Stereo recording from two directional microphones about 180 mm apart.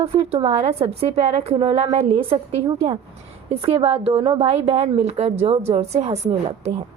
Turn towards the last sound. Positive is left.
turn(degrees=-35)  # may be behind; listen again after turning